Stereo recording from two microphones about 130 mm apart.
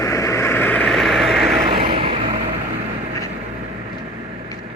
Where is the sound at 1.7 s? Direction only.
40° right (ahead or behind).